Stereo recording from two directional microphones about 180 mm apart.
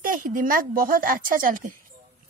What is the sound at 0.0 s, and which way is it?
A woman's voice, 45° right (ahead or behind).